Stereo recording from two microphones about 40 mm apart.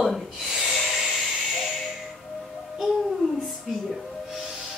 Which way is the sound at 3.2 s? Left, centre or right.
Centre.